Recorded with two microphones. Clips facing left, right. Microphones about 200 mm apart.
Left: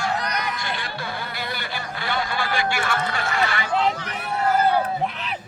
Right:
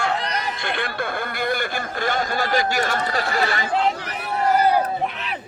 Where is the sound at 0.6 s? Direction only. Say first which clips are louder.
Right 4 dB; 55° right (ahead or behind); by 3.7 s 35° right (ahead or behind).